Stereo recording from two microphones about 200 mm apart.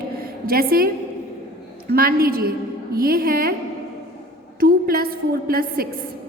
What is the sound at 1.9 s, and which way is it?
A woman's voice, 50° right (ahead or behind).